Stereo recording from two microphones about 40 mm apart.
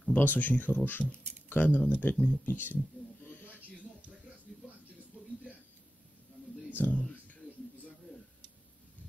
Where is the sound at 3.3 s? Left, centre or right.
Left.